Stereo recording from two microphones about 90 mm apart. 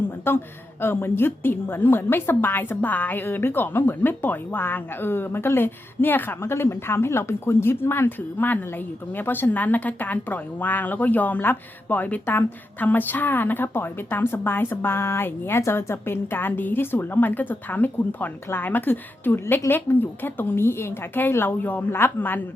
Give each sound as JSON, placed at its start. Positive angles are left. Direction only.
{"t": 0.3, "sound": "a woman's voice", "side_deg": 25}